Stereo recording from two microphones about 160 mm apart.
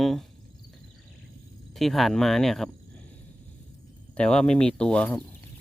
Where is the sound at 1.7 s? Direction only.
Centre (ahead or behind).